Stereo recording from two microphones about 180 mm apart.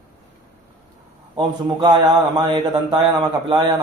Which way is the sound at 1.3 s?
25° right (ahead or behind).